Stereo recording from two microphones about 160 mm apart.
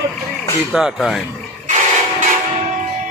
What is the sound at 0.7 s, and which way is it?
Speech, centre (ahead or behind).